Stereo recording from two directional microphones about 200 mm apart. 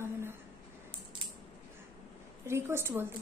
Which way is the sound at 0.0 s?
10° right (ahead or behind).